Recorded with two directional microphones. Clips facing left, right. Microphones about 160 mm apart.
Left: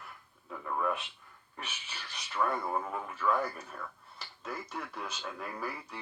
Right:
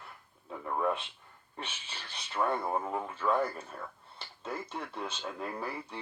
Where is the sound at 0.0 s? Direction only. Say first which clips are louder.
Even; 25° right (ahead or behind).